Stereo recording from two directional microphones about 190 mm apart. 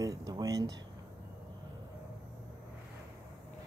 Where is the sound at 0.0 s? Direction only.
20° right (ahead or behind).